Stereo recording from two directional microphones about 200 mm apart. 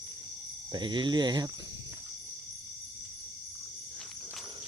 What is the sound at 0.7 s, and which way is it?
Speech, 25° right (ahead or behind).